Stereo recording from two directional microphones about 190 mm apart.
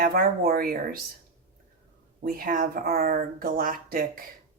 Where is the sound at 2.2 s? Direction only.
50° right (ahead or behind).